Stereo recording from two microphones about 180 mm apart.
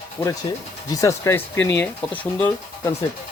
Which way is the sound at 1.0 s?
15° left (ahead or behind).